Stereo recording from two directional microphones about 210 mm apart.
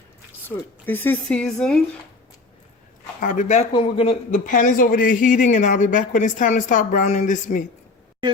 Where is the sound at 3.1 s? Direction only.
40° left (ahead or behind).